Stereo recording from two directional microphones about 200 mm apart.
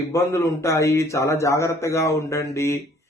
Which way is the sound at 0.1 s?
15° left (ahead or behind).